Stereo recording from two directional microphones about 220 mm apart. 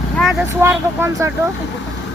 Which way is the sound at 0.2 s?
Centre (ahead or behind).